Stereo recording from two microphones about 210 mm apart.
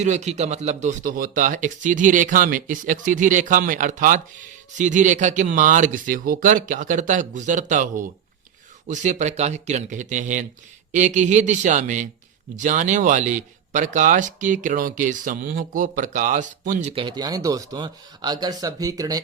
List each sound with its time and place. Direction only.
0.0 s speech: 35° right (ahead or behind)
16.9 s speech: 25° right (ahead or behind)